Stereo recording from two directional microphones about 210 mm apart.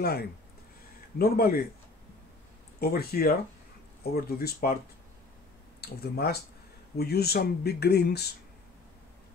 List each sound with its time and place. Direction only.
0.0 s speech: 50° left (ahead or behind)
2.8 s speech: 45° left (ahead or behind)
5.8 s speech: 50° left (ahead or behind)